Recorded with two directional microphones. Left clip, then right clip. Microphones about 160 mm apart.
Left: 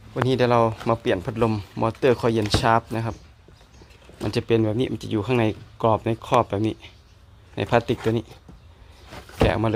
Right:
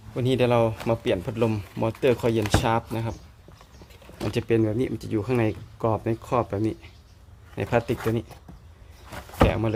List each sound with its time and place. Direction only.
0.1 s speech: 5° left (ahead or behind)
4.3 s speech: 10° left (ahead or behind)
9.4 s speech: 15° left (ahead or behind)